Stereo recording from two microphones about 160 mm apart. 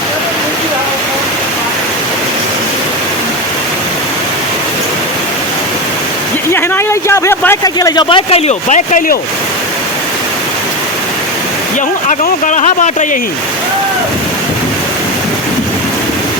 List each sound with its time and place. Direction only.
6.5 s a sound: 15° left (ahead or behind)
8.3 s speech: 45° left (ahead or behind)
12.0 s speech: 50° left (ahead or behind)